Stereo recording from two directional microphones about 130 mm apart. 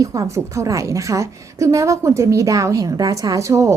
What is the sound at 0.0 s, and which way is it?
A woman's voice, 25° right (ahead or behind).